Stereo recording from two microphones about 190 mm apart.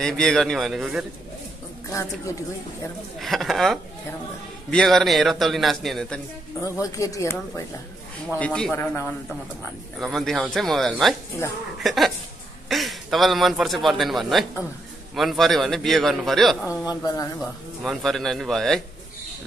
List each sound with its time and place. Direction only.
0.0 s a man's voice: centre (ahead or behind)
1.9 s speech: 15° left (ahead or behind)
3.2 s a man's voice: centre (ahead or behind)
6.8 s speech: 15° left (ahead or behind)
8.4 s speech: 5° left (ahead or behind)
10.1 s a man's voice: centre (ahead or behind)
17.0 s speech: 20° left (ahead or behind)
17.4 s a man's voice: centre (ahead or behind)